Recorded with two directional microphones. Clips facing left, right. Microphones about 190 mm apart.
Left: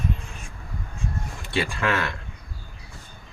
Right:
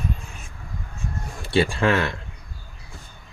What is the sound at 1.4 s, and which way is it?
Speech, 30° right (ahead or behind).